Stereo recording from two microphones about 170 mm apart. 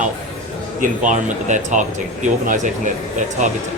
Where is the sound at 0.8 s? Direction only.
45° right (ahead or behind).